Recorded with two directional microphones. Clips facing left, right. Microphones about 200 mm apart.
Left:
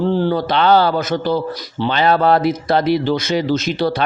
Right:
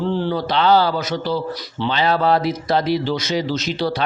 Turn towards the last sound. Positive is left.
turn(degrees=50)  # may be behind; listen again after turning